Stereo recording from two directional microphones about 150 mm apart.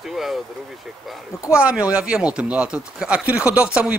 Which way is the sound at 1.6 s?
5° right (ahead or behind).